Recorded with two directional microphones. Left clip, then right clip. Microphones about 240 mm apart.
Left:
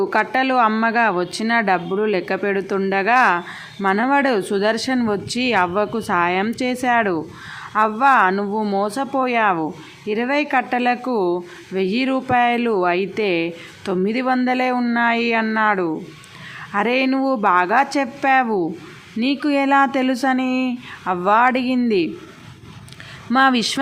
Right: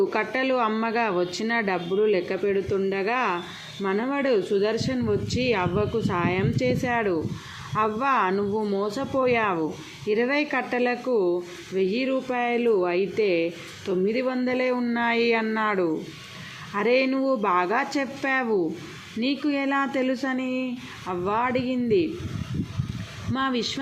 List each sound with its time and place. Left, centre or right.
0.1 s speech: centre
23.3 s speech: left